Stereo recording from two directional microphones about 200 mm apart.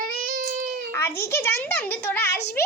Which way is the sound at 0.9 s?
10° left (ahead or behind).